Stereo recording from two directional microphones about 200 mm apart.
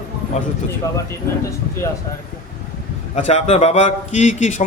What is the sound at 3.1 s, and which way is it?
A man's voice, 35° left (ahead or behind).